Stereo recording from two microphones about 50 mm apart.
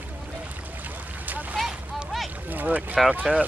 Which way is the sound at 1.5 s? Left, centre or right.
Centre.